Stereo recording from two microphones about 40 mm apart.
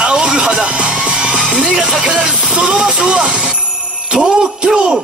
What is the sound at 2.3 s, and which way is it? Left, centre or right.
Music, right.